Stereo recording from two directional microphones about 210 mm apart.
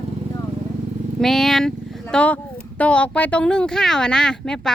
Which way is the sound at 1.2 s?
Centre (ahead or behind).